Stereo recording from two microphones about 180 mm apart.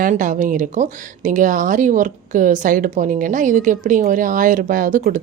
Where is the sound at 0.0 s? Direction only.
45° right (ahead or behind).